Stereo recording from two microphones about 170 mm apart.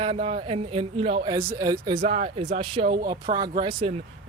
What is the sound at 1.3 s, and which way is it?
Speech, 15° right (ahead or behind).